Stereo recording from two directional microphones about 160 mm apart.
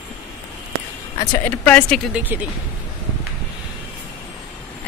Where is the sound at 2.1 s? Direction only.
10° right (ahead or behind).